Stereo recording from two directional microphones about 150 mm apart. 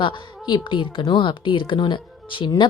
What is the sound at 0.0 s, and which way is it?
A woman's voice, 30° left (ahead or behind).